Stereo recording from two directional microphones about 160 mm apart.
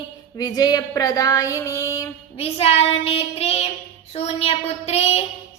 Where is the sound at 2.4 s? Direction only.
40° left (ahead or behind).